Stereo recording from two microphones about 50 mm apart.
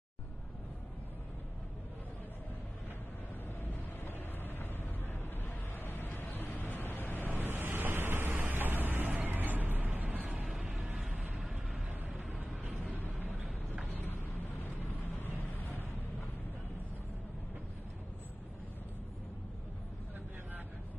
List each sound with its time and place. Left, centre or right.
4.0 s vehicle: left
5.4 s a sound: left
6.3 s vehicle: left
7.3 s waves: right
8.3 s a sound: right
10.4 s vehicle: centre
11.1 s vehicle: right
11.3 s vehicle: centre